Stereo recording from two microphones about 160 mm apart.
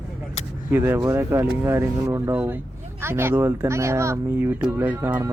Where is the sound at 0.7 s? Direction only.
15° right (ahead or behind).